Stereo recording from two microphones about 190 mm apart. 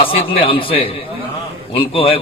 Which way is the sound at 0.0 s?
30° left (ahead or behind).